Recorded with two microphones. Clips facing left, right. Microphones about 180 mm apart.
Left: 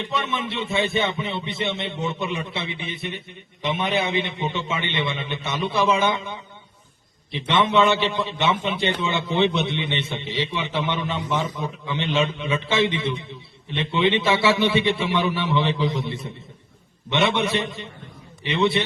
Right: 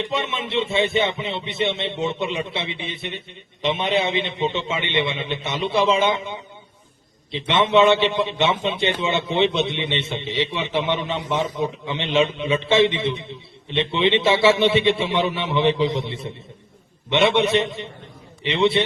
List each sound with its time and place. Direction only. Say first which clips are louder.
0.0 s a man's voice: right 1 dB; 25° right (ahead or behind)